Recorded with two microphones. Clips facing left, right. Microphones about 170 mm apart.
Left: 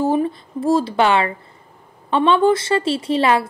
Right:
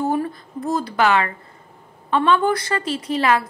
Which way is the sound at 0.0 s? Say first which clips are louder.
Left 4 dB; 25° left (ahead or behind).